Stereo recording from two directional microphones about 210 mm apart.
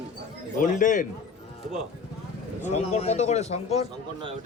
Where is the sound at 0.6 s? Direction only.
40° left (ahead or behind).